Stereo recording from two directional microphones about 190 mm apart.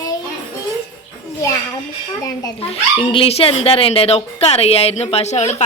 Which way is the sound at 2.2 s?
20° left (ahead or behind).